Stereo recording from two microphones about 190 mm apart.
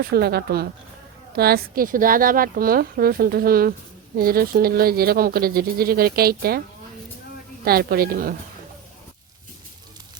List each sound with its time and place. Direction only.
0.0 s speech: 55° right (ahead or behind)
7.6 s speech: 55° right (ahead or behind)